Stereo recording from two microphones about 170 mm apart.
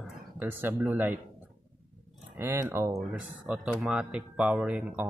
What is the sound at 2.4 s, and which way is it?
Speech, 15° right (ahead or behind).